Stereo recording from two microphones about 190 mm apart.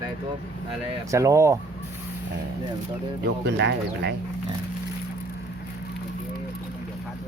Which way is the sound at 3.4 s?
65° right (ahead or behind).